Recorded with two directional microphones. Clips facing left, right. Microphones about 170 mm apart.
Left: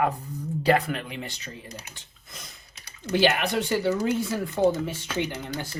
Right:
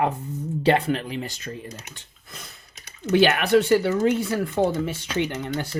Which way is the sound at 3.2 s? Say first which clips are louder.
Right 5 dB; 65° right (ahead or behind).